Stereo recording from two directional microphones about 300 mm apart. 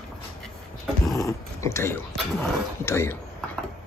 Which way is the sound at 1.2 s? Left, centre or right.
Centre.